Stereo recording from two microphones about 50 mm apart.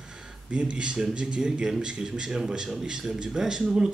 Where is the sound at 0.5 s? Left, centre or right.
Right.